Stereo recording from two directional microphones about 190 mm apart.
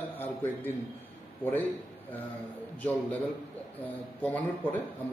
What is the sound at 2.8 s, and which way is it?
A man's voice, 10° left (ahead or behind).